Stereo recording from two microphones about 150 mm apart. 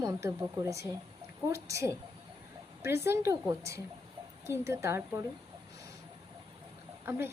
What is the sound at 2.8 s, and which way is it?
A woman's voice, 20° right (ahead or behind).